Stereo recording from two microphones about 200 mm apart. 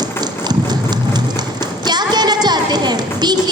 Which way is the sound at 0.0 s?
20° right (ahead or behind).